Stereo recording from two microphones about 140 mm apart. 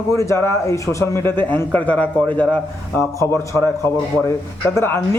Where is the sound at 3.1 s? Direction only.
20° left (ahead or behind).